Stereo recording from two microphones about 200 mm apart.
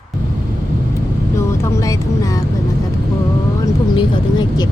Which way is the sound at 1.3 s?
15° left (ahead or behind).